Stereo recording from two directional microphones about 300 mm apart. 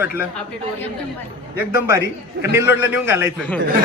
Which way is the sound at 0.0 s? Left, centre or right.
Centre.